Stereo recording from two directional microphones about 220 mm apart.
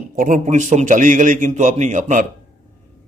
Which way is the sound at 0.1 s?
35° right (ahead or behind).